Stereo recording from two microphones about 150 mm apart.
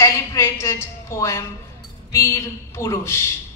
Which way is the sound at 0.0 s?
20° left (ahead or behind).